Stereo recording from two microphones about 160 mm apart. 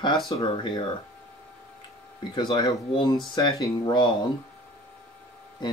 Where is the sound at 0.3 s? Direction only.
30° left (ahead or behind).